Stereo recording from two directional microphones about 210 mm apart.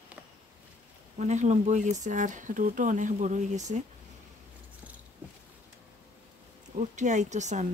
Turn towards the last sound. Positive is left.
turn(degrees=-35)  # may be behind; listen again after turning